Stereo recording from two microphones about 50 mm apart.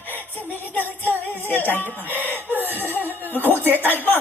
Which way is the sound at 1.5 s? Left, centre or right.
Left.